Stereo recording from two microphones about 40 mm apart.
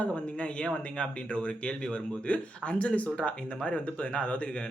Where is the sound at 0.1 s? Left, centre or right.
Left.